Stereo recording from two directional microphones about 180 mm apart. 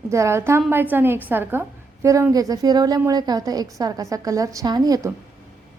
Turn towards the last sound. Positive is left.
turn(degrees=-20)  # may be behind; listen again after turning